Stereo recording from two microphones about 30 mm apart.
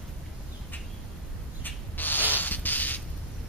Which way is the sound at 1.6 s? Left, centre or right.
Left.